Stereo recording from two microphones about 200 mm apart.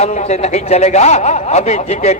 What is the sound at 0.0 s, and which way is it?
A man's voice, 35° left (ahead or behind).